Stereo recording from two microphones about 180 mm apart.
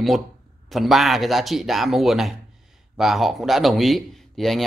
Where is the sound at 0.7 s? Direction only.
Centre (ahead or behind).